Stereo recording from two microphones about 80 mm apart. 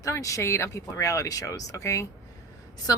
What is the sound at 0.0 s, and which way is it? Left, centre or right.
Speech, left.